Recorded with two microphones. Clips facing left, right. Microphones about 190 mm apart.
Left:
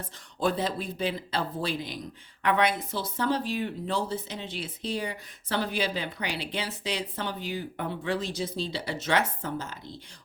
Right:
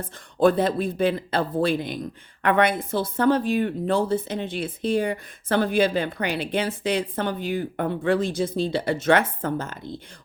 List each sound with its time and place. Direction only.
0.0 s speech: 55° right (ahead or behind)